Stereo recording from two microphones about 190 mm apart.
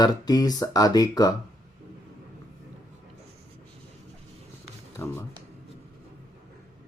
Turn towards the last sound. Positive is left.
turn(degrees=15)  # may be behind; listen again after turning